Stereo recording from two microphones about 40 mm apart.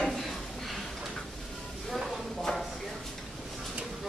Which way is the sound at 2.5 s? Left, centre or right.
Left.